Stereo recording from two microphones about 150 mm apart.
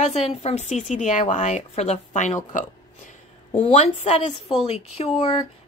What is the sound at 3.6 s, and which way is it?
Speech, 45° left (ahead or behind).